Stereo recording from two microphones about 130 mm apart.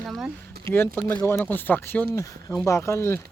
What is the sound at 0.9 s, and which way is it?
Speech, 15° left (ahead or behind).